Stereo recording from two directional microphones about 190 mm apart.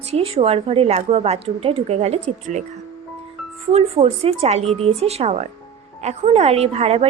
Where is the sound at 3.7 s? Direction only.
30° right (ahead or behind).